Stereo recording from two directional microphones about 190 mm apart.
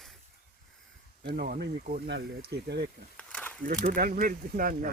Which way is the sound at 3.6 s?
45° right (ahead or behind).